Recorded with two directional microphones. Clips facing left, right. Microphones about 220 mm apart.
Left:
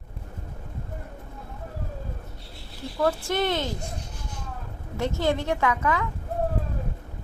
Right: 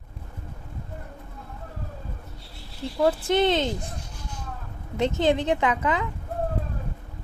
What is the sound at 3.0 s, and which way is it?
Speech, 20° right (ahead or behind).